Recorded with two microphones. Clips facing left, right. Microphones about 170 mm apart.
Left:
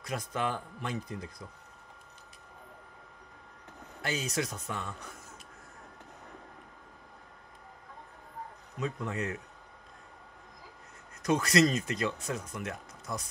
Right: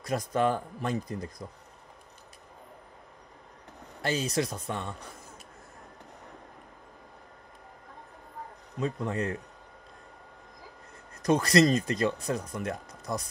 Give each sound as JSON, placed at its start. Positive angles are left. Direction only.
{"t": 0.0, "sound": "speech", "side_deg": -40}
{"t": 4.0, "sound": "speech", "side_deg": -30}
{"t": 8.7, "sound": "speech", "side_deg": -35}
{"t": 11.2, "sound": "speech", "side_deg": -35}